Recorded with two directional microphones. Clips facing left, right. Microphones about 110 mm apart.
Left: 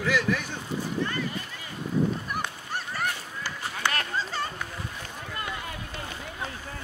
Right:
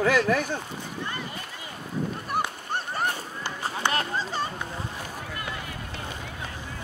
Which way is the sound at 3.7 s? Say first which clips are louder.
Right 3 dB; 25° right (ahead or behind).